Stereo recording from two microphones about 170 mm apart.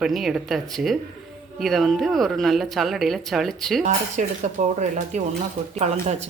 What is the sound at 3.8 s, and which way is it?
Speech, 45° right (ahead or behind).